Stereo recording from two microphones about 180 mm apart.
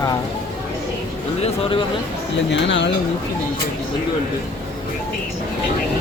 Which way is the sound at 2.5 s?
80° left.